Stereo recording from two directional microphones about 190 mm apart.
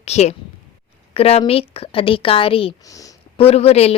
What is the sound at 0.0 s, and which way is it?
A woman's voice, 35° left (ahead or behind).